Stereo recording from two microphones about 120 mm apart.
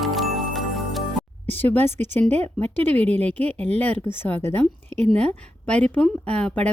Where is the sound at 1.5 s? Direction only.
15° left (ahead or behind).